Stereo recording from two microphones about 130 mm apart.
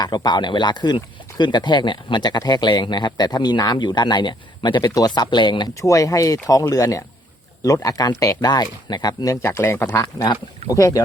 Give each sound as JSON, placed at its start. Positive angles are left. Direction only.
{"t": 0.0, "sound": "speech", "side_deg": 30}
{"t": 5.8, "sound": "speech", "side_deg": 25}